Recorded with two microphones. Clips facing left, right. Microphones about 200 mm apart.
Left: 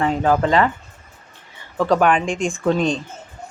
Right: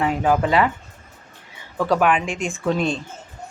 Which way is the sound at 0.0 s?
10° right (ahead or behind).